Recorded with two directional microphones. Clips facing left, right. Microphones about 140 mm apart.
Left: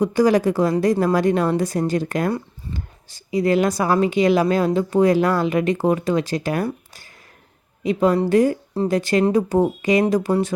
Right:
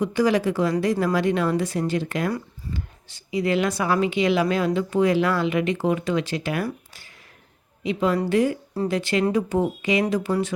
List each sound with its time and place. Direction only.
0.0 s speech: 40° left (ahead or behind)
7.9 s a woman's voice: 45° left (ahead or behind)